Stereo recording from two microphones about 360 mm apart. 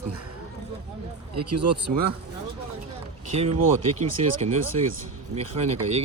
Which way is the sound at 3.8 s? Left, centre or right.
Centre.